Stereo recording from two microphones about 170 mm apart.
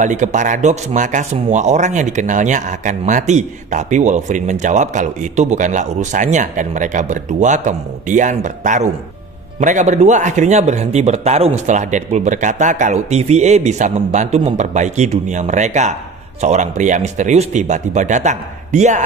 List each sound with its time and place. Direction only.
0.0 s speech: 45° right (ahead or behind)